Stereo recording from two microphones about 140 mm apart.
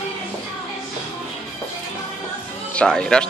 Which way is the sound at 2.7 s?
5° left (ahead or behind).